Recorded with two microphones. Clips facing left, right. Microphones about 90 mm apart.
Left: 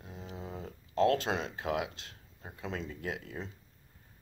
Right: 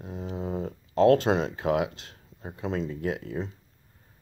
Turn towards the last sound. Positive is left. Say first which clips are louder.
# right 8 dB
turn(degrees=-35)  # may be behind; listen again after turning